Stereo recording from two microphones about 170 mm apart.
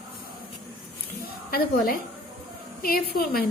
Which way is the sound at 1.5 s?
60° left (ahead or behind).